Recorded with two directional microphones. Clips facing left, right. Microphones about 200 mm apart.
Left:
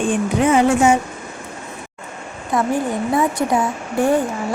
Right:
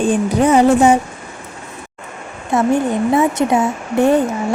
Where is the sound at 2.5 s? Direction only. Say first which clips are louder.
Right 4 dB; 25° right (ahead or behind).